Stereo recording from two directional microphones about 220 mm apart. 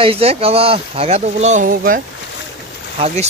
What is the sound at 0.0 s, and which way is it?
Speech, 25° right (ahead or behind).